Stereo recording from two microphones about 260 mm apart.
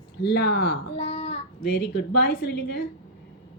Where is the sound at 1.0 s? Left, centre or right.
Left.